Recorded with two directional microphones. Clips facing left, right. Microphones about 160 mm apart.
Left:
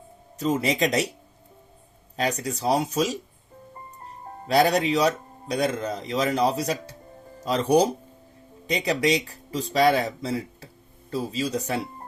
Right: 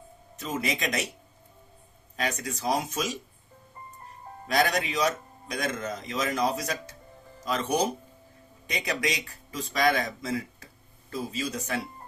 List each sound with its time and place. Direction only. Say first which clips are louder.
0.3 s a man's voice: left 8 dB; 35° left (ahead or behind)
2.1 s a man's voice: left 5 dB; 35° left (ahead or behind)
4.4 s a man's voice: left 6 dB; 35° left (ahead or behind)